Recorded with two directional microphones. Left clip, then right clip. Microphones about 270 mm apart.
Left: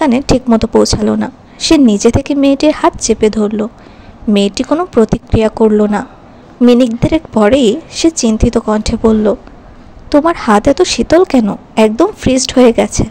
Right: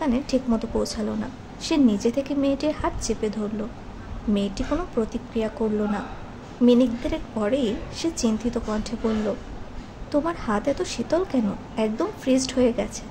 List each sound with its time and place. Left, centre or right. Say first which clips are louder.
0.0 s a woman's voice: left 13 dB; left